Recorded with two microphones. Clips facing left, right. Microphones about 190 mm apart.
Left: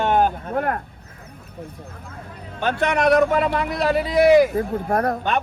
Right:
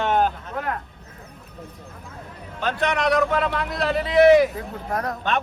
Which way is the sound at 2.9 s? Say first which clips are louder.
Left 5 dB; 50° left (ahead or behind).